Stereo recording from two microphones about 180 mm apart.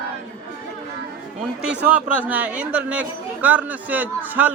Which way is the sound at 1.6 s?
10° right (ahead or behind).